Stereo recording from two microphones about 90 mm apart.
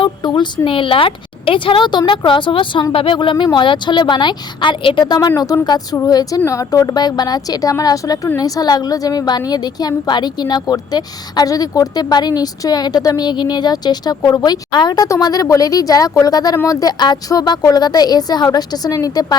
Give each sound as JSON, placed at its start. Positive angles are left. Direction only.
{"t": 0.0, "sound": "a woman's voice", "side_deg": 60}
{"t": 2.9, "sound": "a woman's voice", "side_deg": 80}
{"t": 5.0, "sound": "a woman's voice", "side_deg": 50}
{"t": 15.0, "sound": "a woman's voice", "side_deg": 40}